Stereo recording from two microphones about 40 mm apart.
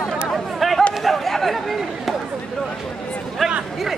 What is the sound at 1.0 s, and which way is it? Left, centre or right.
Chatter, centre.